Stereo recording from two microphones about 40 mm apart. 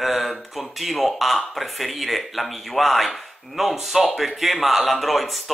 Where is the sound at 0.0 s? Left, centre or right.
Centre.